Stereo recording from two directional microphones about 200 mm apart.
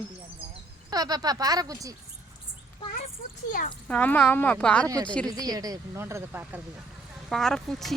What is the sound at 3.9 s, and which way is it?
Speech, 5° left (ahead or behind).